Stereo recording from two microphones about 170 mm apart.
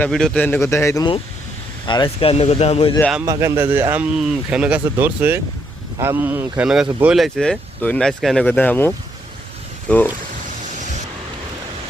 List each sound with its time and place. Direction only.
0.0 s a man's voice: 5° left (ahead or behind)
1.9 s speech: 30° left (ahead or behind)
3.0 s speech: centre (ahead or behind)
3.2 s a man's voice: 20° right (ahead or behind); by 10.0 s 5° left (ahead or behind)